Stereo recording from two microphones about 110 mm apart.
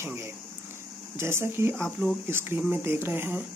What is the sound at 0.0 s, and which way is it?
Speech, 25° right (ahead or behind).